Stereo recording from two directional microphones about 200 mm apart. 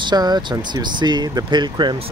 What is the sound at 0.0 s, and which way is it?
Speech, 20° right (ahead or behind).